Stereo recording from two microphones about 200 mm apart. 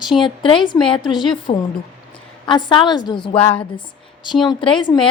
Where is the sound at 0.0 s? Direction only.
Centre (ahead or behind).